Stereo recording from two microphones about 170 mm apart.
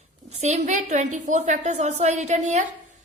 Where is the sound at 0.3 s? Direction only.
40° right (ahead or behind).